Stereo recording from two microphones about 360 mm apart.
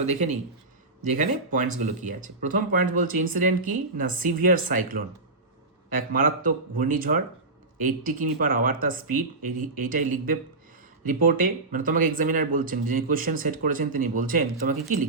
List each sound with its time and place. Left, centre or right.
0.0 s speech: centre
5.9 s speech: right